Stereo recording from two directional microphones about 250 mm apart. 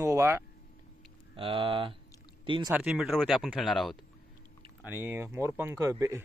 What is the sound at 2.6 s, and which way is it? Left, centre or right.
Speech, centre.